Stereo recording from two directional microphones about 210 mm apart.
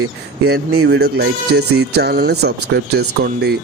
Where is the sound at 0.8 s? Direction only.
55° right (ahead or behind).